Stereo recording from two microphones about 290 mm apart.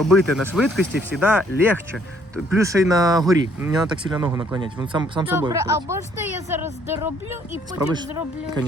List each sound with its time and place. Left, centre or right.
0.0 s speech: centre